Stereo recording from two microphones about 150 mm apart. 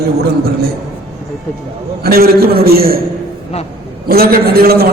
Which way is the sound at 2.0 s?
85° right.